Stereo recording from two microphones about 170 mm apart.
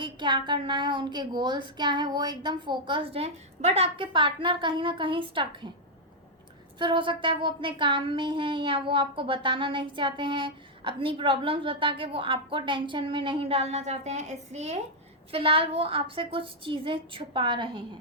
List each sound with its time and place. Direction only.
0.0 s speech: 25° right (ahead or behind)
6.7 s a woman's voice: 30° right (ahead or behind)